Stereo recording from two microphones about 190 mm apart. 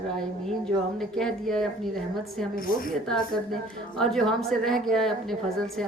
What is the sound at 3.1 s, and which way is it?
A woman's voice, 5° left (ahead or behind).